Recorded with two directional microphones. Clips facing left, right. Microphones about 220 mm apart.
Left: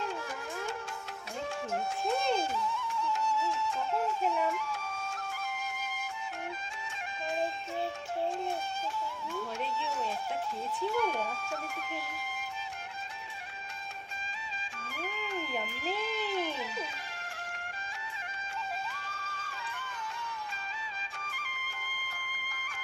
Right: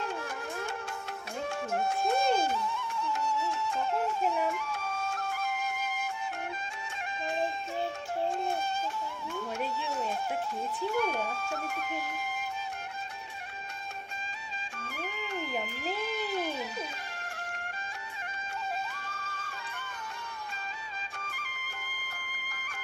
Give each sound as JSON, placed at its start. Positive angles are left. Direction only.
{"t": 1.7, "sound": "music", "side_deg": -60}
{"t": 4.4, "sound": "flute", "side_deg": -65}
{"t": 10.9, "sound": "music", "side_deg": -65}
{"t": 14.8, "sound": "music", "side_deg": -60}
{"t": 19.0, "sound": "music", "side_deg": -60}
{"t": 21.8, "sound": "music", "side_deg": -60}